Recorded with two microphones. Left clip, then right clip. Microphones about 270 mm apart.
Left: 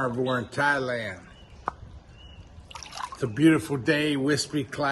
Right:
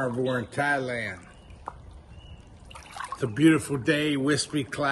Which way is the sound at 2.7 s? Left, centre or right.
Left.